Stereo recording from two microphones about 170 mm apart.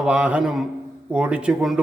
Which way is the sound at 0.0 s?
5° right (ahead or behind).